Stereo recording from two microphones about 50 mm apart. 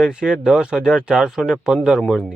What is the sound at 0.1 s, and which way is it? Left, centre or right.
Speech, centre.